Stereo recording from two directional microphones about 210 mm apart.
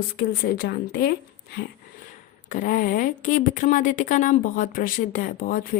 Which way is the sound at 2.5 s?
40° left (ahead or behind).